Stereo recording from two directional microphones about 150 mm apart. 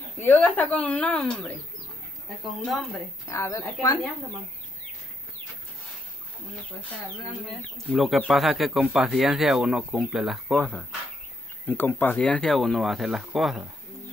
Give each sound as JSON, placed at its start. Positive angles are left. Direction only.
{"t": 0.2, "sound": "speech", "side_deg": 10}
{"t": 3.3, "sound": "a woman's voice", "side_deg": 20}
{"t": 7.4, "sound": "speech", "side_deg": 0}